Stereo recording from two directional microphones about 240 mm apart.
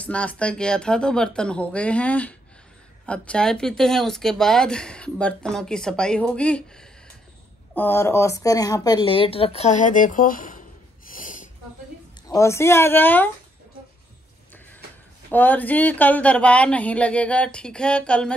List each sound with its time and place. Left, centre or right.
0.0 s speech: centre; by 10.6 s left
11.1 s snort: left
12.3 s speech: centre
15.3 s speech: centre